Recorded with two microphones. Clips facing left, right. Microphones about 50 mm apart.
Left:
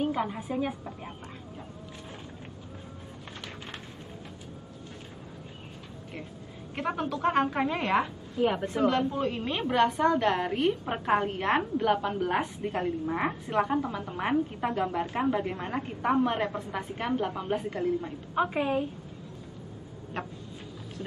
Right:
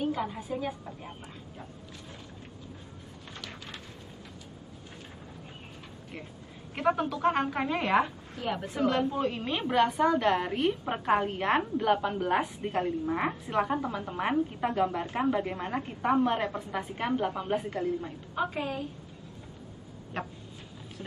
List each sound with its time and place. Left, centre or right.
0.0 s speech: centre
6.7 s a woman's voice: centre
8.4 s a woman's voice: centre
8.6 s a woman's voice: centre
18.3 s a woman's voice: centre
20.2 s a woman's voice: centre